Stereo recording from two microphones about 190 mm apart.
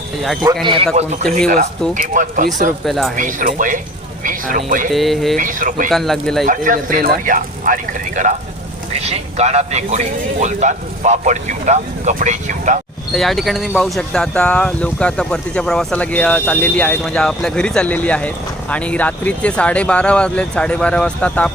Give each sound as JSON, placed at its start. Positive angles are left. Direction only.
{"t": 0.6, "sound": "a man's voice", "side_deg": -25}
{"t": 0.9, "sound": "a man's voice", "side_deg": -35}
{"t": 2.8, "sound": "speech", "side_deg": 0}
{"t": 3.2, "sound": "speech", "side_deg": -45}
{"t": 4.9, "sound": "speech", "side_deg": 0}
{"t": 5.4, "sound": "speech", "side_deg": -45}
{"t": 5.9, "sound": "speech", "side_deg": 0}
{"t": 6.4, "sound": "a man's voice", "side_deg": -45}
{"t": 13.1, "sound": "speech", "side_deg": 0}